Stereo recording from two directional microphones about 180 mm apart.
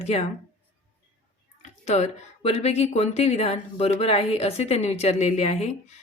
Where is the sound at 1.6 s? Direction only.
40° left (ahead or behind).